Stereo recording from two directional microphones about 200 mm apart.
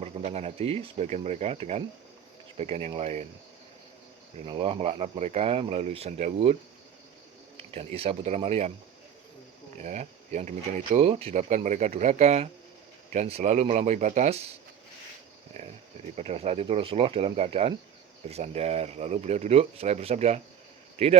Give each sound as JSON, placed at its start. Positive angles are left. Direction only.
{"t": 0.0, "sound": "speech", "side_deg": -35}
{"t": 4.4, "sound": "speech", "side_deg": -25}
{"t": 9.8, "sound": "speech", "side_deg": -35}
{"t": 16.1, "sound": "a man's voice", "side_deg": -35}